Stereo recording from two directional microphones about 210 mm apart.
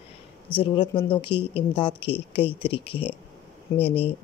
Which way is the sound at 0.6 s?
25° left (ahead or behind).